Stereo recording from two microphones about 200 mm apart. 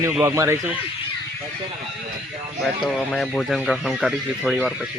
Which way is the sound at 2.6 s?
Centre (ahead or behind).